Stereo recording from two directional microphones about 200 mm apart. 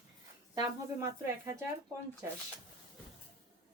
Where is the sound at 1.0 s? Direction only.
15° right (ahead or behind).